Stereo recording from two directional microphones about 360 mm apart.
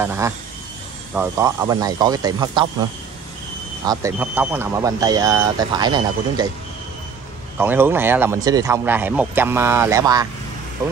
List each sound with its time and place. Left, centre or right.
0.0 s speech: centre
3.8 s speech: centre
7.5 s speech: centre